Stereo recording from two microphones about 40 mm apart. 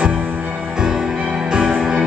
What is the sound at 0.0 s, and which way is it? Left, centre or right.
Music, right.